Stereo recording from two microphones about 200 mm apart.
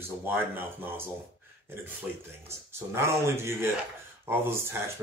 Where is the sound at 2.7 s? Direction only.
15° right (ahead or behind).